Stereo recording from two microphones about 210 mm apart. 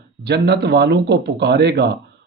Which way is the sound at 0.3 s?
50° right (ahead or behind).